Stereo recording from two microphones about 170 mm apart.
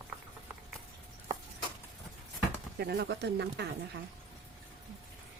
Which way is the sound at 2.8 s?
75° right (ahead or behind).